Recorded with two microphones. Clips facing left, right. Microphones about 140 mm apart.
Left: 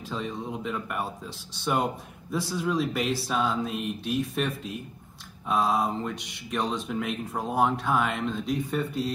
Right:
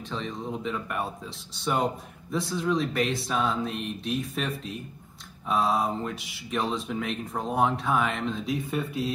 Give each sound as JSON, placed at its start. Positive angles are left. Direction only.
{"t": 0.1, "sound": "speech", "side_deg": 5}